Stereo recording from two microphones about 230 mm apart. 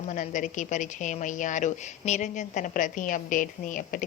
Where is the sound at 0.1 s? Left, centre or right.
Left.